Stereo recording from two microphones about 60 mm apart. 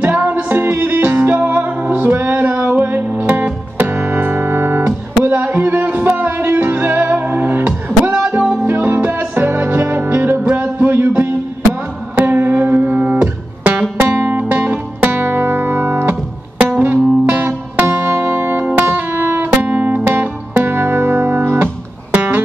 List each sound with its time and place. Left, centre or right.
0.0 s music: right
7.6 s music: centre
8.6 s music: right
10.5 s a sound: right
12.2 s music: right
13.9 s music: right
14.5 s music: right
16.7 s music: right
20.6 s music: right